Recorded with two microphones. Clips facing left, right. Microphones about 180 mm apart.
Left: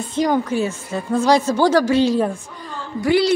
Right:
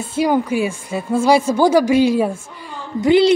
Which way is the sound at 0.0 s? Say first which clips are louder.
Right 2 dB; 10° right (ahead or behind).